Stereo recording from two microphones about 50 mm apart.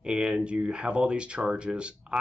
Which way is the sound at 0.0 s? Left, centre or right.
Centre.